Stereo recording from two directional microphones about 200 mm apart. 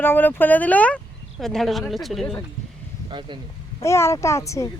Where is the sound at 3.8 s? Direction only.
15° left (ahead or behind).